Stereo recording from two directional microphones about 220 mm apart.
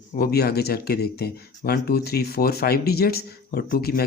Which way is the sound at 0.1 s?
45° left (ahead or behind).